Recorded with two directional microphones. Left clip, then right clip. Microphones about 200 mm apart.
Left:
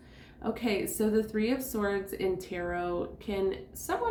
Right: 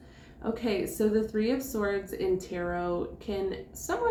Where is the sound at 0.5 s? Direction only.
40° left (ahead or behind).